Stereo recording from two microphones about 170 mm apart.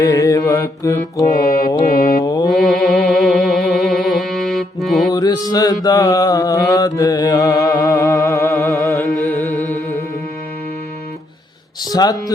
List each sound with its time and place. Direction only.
0.0 s mantra: 20° left (ahead or behind)
1.8 s mantra: 55° left (ahead or behind)
2.2 s mantra: 25° left (ahead or behind)
2.5 s music: centre (ahead or behind)
5.1 s mantra: 20° left (ahead or behind)
11.9 s speech: 25° left (ahead or behind)